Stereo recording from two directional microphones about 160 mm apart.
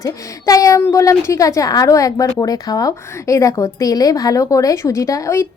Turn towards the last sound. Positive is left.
turn(degrees=20)  # may be behind; listen again after turning